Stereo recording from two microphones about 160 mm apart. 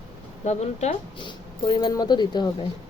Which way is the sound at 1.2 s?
30° left (ahead or behind).